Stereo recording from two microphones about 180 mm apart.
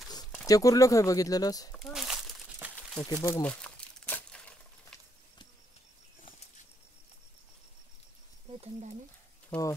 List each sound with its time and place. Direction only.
0.5 s speech: 20° left (ahead or behind)
1.7 s crumpling: centre (ahead or behind)
3.0 s speech: 20° left (ahead or behind)
3.4 s crumpling: 5° left (ahead or behind)
9.5 s speech: 15° left (ahead or behind)